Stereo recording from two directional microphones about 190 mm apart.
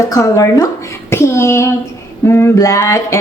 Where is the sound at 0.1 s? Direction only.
15° left (ahead or behind).